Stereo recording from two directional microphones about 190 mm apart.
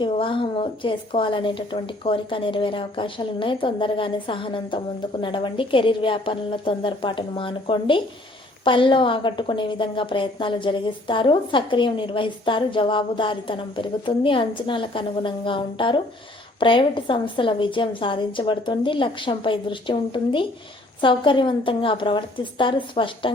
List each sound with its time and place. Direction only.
0.0 s a woman's voice: 25° left (ahead or behind)